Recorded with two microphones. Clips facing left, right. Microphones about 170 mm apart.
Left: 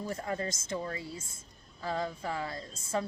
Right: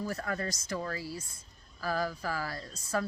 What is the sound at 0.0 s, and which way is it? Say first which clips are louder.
A woman's voice: even; 25° left (ahead or behind).